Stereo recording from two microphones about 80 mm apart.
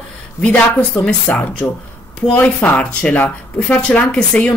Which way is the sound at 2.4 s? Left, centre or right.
Left.